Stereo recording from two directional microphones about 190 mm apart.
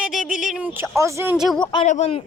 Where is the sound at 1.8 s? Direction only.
35° left (ahead or behind).